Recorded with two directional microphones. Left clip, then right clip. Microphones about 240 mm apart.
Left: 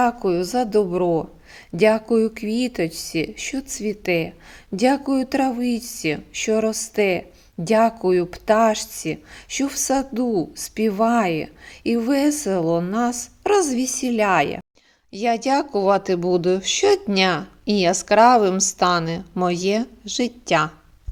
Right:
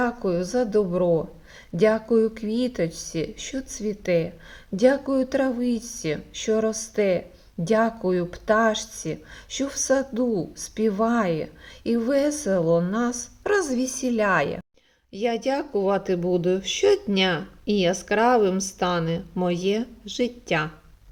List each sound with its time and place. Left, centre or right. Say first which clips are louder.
0.0 s speech: left 5 dB; left
15.1 s speech: left 5 dB; centre